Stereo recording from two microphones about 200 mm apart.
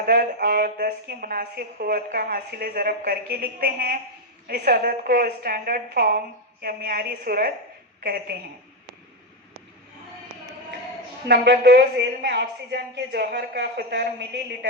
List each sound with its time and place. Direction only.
0.0 s a woman's voice: 50° right (ahead or behind)
11.3 s a woman's voice: 55° right (ahead or behind)